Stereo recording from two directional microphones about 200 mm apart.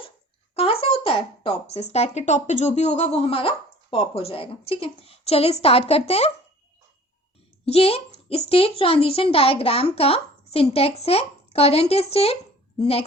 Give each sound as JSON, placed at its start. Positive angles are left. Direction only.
{"t": 0.5, "sound": "speech", "side_deg": 30}
{"t": 7.6, "sound": "a child's voice", "side_deg": 30}